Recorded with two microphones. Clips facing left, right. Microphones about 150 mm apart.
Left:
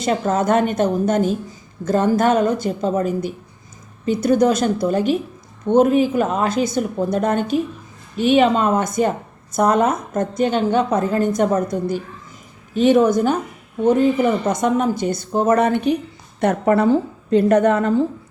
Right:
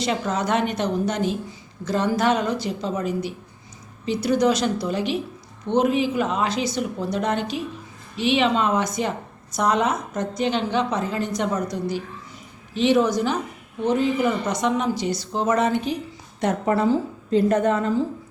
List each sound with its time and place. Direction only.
0.0 s a woman's voice: 50° left (ahead or behind); by 18.0 s 65° left (ahead or behind)